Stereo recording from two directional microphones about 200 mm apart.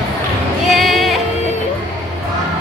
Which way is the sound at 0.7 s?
Centre (ahead or behind).